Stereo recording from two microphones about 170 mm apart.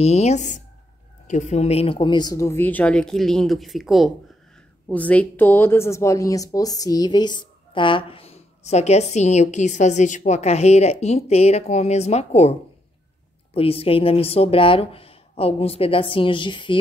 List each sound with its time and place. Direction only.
0.0 s speech: 40° left (ahead or behind)